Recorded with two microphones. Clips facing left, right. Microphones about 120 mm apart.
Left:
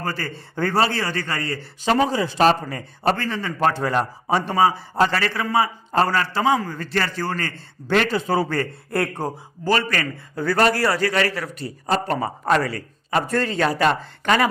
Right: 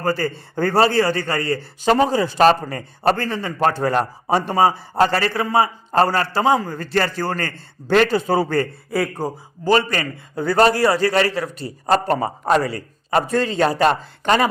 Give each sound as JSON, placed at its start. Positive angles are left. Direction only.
{"t": 0.0, "sound": "speech", "side_deg": -35}
{"t": 8.9, "sound": "speech", "side_deg": 0}
{"t": 9.6, "sound": "a man's voice", "side_deg": -25}
{"t": 13.2, "sound": "a man's voice", "side_deg": -15}